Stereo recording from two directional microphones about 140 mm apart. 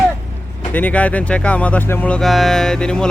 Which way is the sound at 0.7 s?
10° left (ahead or behind).